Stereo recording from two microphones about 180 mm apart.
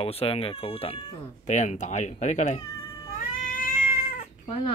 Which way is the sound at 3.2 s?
50° left (ahead or behind).